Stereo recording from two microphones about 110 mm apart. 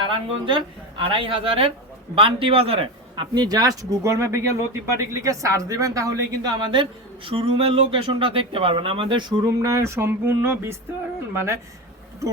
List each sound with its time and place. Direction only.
0.0 s a man's voice: 50° right (ahead or behind); by 6.5 s 30° right (ahead or behind)
6.6 s speech: 45° right (ahead or behind)
9.6 s speech: 25° right (ahead or behind)